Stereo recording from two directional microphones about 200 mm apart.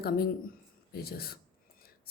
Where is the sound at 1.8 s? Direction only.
50° left (ahead or behind).